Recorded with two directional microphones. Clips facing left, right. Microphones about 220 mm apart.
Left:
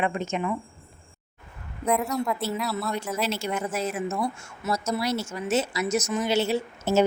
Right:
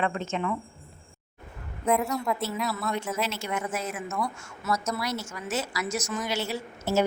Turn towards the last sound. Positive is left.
turn(degrees=25)  # may be behind; listen again after turning